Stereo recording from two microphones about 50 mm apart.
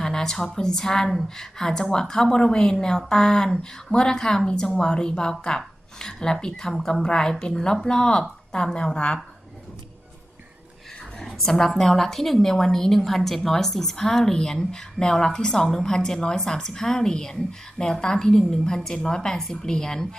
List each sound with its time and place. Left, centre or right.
0.0 s a woman's voice: centre
11.2 s a woman's voice: centre